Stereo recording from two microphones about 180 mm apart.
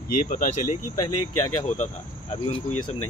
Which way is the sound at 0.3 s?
45° left (ahead or behind).